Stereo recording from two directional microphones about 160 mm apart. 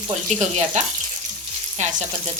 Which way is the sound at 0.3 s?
45° right (ahead or behind).